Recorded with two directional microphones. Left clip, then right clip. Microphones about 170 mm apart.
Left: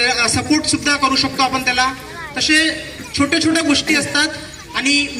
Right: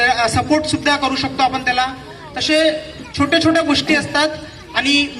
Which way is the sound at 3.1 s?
20° left (ahead or behind).